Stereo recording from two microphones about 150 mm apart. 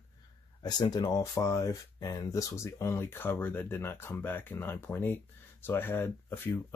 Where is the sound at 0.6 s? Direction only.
30° left (ahead or behind).